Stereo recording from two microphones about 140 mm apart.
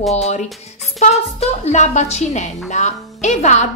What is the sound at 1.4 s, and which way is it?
A woman's voice, 55° left (ahead or behind).